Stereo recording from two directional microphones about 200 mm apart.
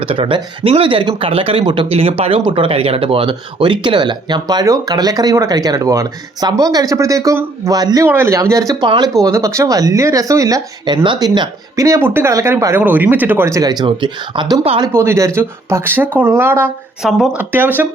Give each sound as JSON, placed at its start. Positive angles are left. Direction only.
{"t": 0.0, "sound": "speech", "side_deg": -25}
{"t": 14.9, "sound": "speech", "side_deg": -15}